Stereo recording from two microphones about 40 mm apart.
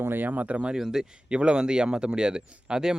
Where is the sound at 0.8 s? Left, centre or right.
Centre.